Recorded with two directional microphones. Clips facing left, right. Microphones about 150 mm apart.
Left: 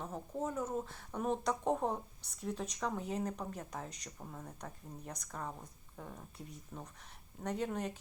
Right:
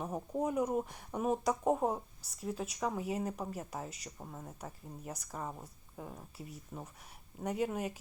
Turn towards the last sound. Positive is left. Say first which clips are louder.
# right 2 dB
turn(degrees=-10)  # may be behind; listen again after turning